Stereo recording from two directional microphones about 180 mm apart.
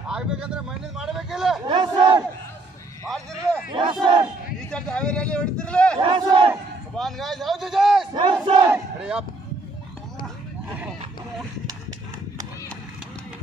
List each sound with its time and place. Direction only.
0.1 s speech: 5° right (ahead or behind)
1.7 s battle cry: 25° right (ahead or behind)
4.0 s battle cry: 25° right (ahead or behind)
4.6 s speech: 5° left (ahead or behind)
5.9 s battle cry: 30° right (ahead or behind)
7.0 s a man's voice: centre (ahead or behind)
8.1 s battle cry: 25° right (ahead or behind)
8.7 s a sound: 5° right (ahead or behind)